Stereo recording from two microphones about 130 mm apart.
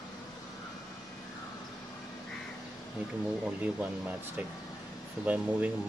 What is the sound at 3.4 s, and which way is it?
Speech, 10° right (ahead or behind).